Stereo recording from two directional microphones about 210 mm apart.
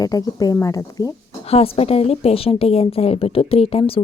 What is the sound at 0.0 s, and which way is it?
Speech, 15° left (ahead or behind).